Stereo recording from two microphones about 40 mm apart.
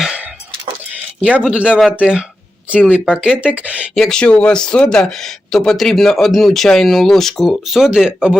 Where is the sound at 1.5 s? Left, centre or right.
Right.